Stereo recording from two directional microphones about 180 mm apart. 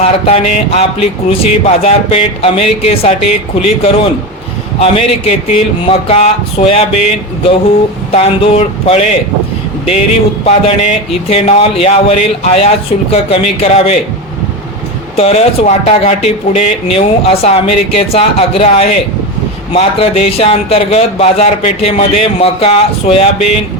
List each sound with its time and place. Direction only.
0.0 s speech: 35° left (ahead or behind)
10.4 s speech: 35° left (ahead or behind)
15.1 s speech: 35° left (ahead or behind)